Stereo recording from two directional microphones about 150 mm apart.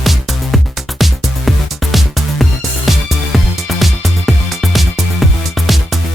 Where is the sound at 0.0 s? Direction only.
Centre (ahead or behind).